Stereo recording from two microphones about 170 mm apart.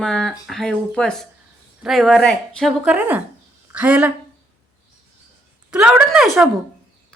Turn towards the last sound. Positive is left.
turn(degrees=0)  # may be behind; listen again after turning